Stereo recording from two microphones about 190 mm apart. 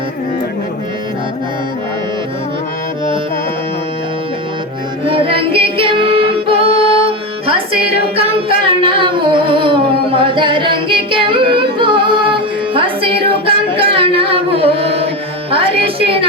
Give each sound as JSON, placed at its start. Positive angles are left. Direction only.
{"t": 5.0, "sound": "music", "side_deg": -30}